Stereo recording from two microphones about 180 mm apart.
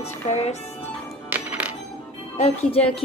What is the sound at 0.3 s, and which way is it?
Speech, 40° left (ahead or behind).